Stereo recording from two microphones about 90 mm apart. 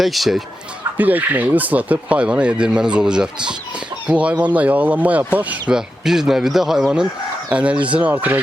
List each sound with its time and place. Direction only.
0.0 s speech: centre (ahead or behind)
0.9 s speech: 20° right (ahead or behind)